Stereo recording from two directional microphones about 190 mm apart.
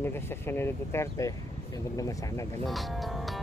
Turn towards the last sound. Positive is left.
turn(degrees=0)  # may be behind; listen again after turning